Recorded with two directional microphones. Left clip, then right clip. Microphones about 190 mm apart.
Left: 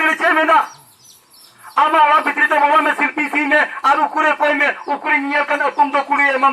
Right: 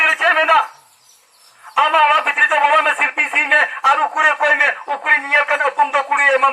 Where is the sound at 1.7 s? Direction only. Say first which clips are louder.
Left 1 dB; 30° left (ahead or behind).